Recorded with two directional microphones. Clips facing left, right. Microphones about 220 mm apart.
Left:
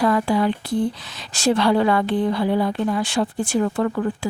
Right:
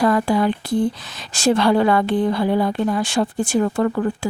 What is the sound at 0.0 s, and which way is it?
A woman's voice, 45° right (ahead or behind).